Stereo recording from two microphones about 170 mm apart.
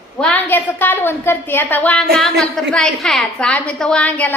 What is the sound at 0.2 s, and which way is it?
A woman's voice, 10° left (ahead or behind).